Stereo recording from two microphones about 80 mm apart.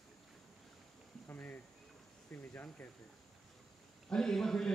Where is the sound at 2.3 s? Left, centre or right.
Left.